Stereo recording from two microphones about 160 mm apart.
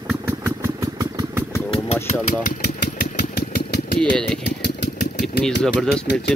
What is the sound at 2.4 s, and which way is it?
Engine, 75° left (ahead or behind).